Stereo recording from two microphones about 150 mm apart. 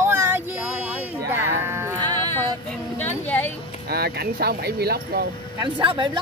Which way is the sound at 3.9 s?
90° right.